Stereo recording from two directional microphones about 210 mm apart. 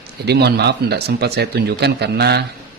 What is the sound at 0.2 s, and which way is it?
Speech, 50° right (ahead or behind).